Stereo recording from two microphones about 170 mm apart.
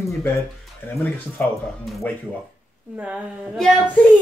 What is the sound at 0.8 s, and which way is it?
Speech, 10° left (ahead or behind).